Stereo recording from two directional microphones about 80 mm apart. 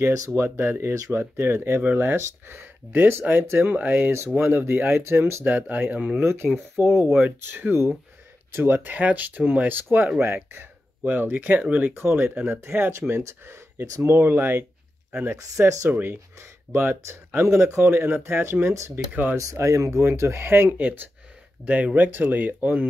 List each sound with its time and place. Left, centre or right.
0.3 s speech: right
1.2 s speech: right
6.2 s speech: right
11.9 s speech: right